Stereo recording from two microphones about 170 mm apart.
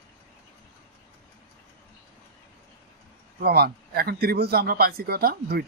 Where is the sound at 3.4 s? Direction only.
65° right (ahead or behind).